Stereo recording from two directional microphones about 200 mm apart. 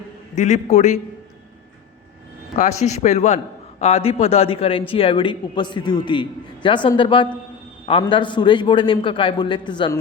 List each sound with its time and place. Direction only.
0.3 s a man's voice: 35° left (ahead or behind)
2.6 s a man's voice: 35° left (ahead or behind)